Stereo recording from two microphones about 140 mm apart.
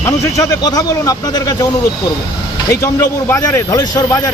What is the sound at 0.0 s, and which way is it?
A man's voice, 20° left (ahead or behind).